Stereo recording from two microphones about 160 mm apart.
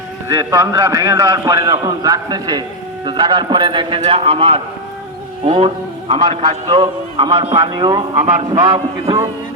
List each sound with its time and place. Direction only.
0.3 s a man's voice: 20° right (ahead or behind)